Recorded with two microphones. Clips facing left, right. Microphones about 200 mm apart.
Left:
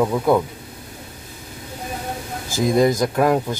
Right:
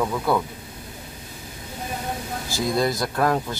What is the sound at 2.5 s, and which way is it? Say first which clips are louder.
Speech: left 6 dB; 20° left (ahead or behind).